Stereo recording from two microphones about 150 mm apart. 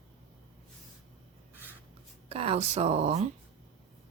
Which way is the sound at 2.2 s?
40° right (ahead or behind).